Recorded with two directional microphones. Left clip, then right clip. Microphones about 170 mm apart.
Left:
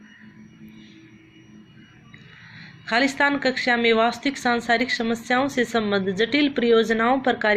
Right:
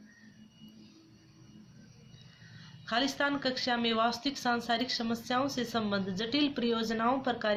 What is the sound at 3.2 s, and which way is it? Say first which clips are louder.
A woman's voice: left 10 dB; 20° left (ahead or behind).